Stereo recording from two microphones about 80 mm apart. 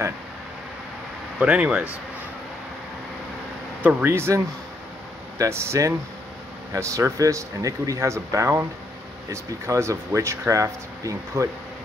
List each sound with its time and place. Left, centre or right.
1.4 s speech: centre
3.8 s speech: right
5.4 s speech: right